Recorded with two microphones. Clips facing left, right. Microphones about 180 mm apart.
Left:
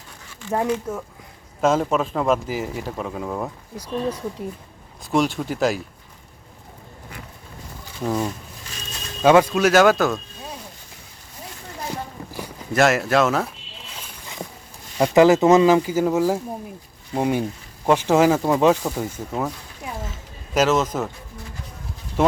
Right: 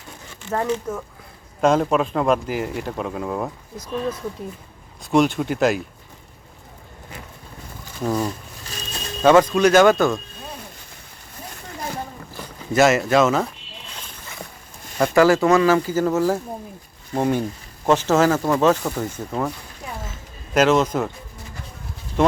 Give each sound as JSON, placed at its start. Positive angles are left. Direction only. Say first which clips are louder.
{"t": 0.5, "sound": "speech", "louder": "left 1 dB", "side_deg": 10}
{"t": 3.8, "sound": "speech", "louder": "left 1 dB", "side_deg": 15}
{"t": 5.1, "sound": "speech", "louder": "right 3 dB", "side_deg": 0}
{"t": 8.0, "sound": "speech", "louder": "right 1 dB", "side_deg": 0}
{"t": 12.3, "sound": "boat", "louder": "left 3 dB", "side_deg": 10}
{"t": 12.7, "sound": "speech", "louder": "right 2 dB", "side_deg": 0}
{"t": 13.9, "sound": "a sound", "louder": "left 2 dB", "side_deg": 15}
{"t": 14.9, "sound": "speech", "louder": "left 1 dB", "side_deg": 20}